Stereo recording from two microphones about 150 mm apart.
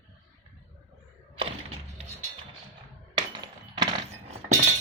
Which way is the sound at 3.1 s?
25° right (ahead or behind).